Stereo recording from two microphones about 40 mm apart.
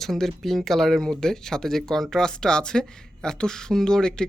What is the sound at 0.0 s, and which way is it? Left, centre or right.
Speech, centre.